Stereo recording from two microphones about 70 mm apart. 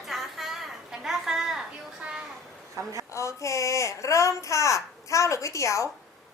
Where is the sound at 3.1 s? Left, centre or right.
Left.